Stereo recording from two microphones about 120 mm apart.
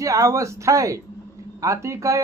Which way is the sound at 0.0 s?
25° right (ahead or behind).